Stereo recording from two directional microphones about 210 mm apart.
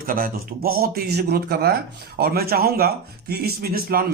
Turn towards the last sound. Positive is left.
turn(degrees=-45)  # may be behind; listen again after turning